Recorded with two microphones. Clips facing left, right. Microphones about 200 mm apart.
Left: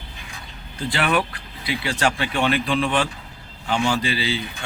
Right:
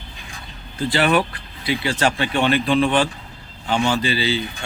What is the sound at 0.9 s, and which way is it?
Speech, 30° right (ahead or behind).